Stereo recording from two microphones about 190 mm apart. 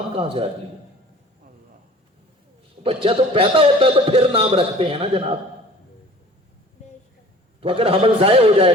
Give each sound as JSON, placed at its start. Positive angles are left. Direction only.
{"t": 0.2, "sound": "a man's voice", "side_deg": -30}
{"t": 2.8, "sound": "a man's voice", "side_deg": -30}
{"t": 7.6, "sound": "a man's voice", "side_deg": -30}